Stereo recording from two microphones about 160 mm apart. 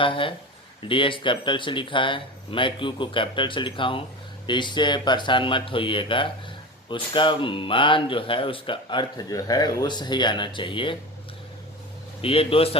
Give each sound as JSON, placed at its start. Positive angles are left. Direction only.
{"t": 0.0, "sound": "speech", "side_deg": 35}
{"t": 12.2, "sound": "speech", "side_deg": 35}